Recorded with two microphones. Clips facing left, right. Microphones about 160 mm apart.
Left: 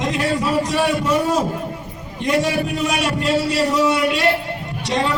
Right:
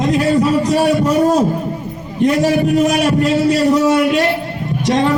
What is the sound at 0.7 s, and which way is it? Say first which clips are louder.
A man's voice: right 5 dB; 40° right (ahead or behind).